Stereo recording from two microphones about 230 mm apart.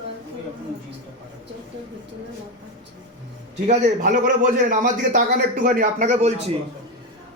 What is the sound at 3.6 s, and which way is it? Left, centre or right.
Speech, right.